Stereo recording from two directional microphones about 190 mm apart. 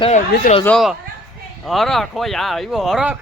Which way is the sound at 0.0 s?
35° left (ahead or behind).